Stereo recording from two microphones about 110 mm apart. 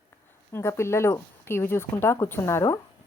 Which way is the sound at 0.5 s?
25° left (ahead or behind).